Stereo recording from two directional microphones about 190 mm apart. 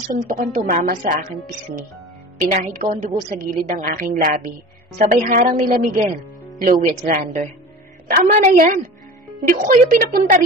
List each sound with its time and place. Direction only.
0.2 s a woman's voice: 45° right (ahead or behind)
2.8 s a woman's voice: 40° right (ahead or behind)